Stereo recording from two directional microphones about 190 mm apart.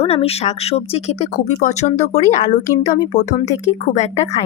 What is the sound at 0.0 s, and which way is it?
A woman's voice, 30° left (ahead or behind).